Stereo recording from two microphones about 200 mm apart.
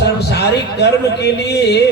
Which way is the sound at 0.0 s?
55° left (ahead or behind).